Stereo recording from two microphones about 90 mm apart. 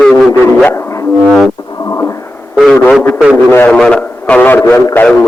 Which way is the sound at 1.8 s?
35° left (ahead or behind).